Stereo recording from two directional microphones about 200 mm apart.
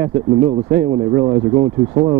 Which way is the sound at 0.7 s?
20° right (ahead or behind).